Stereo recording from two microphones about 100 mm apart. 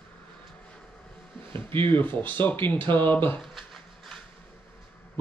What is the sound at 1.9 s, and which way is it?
Speech, 20° left (ahead or behind).